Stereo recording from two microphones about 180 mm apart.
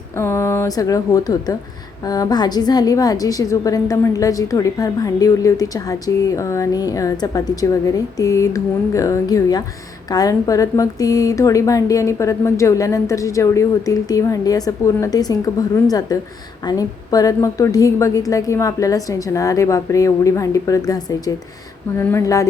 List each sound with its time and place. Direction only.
0.2 s a woman's voice: 15° left (ahead or behind)